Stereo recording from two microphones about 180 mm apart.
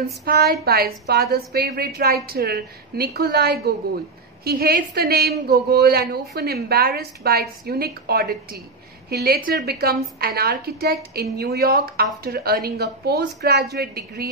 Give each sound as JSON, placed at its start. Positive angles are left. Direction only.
{"t": 0.2, "sound": "a woman's voice", "side_deg": -60}